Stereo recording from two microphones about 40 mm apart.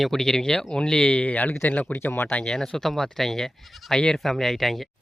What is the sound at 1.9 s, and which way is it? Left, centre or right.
Speech, left.